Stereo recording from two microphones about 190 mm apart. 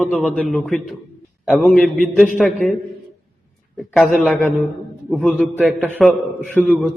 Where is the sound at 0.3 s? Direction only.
Centre (ahead or behind).